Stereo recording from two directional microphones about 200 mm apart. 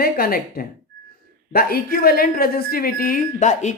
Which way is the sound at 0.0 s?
45° left (ahead or behind).